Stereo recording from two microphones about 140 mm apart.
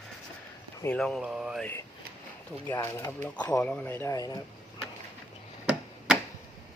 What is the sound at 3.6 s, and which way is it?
Speech, 5° left (ahead or behind).